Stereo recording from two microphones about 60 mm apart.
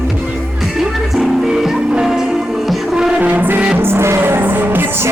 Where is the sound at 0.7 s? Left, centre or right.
Centre.